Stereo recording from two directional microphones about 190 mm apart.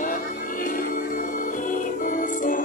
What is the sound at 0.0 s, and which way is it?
Music, 45° left (ahead or behind).